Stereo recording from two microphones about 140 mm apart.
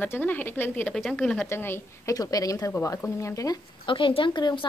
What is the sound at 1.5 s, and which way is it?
Speech, 15° left (ahead or behind).